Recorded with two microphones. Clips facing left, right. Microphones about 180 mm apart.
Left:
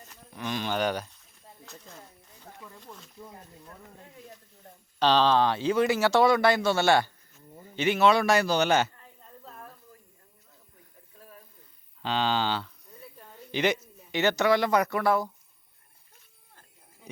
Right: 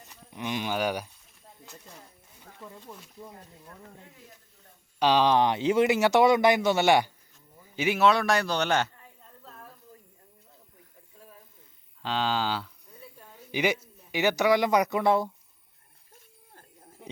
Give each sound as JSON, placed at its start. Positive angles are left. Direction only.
{"t": 0.1, "sound": "speech", "side_deg": -15}
{"t": 4.9, "sound": "a man's voice", "side_deg": -10}
{"t": 12.0, "sound": "a man's voice", "side_deg": 0}
{"t": 17.0, "sound": "a sound", "side_deg": -70}